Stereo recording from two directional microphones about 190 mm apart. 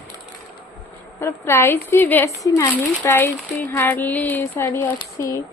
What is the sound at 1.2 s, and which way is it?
A woman's voice, 15° left (ahead or behind).